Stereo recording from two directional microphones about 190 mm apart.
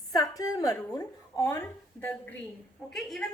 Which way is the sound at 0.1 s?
20° left (ahead or behind).